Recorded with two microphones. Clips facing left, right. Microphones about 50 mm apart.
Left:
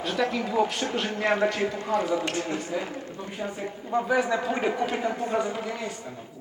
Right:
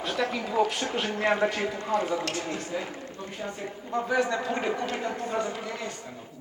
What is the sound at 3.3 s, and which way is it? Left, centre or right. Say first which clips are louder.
Speech: left 3 dB; centre.